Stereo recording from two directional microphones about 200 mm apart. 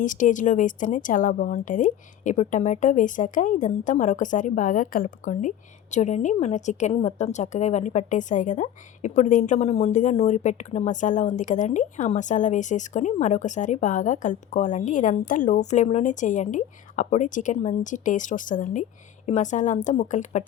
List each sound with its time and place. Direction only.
0.0 s a woman's voice: 40° left (ahead or behind)